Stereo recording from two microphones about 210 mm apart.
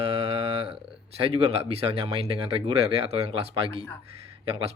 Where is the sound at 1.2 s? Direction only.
25° right (ahead or behind).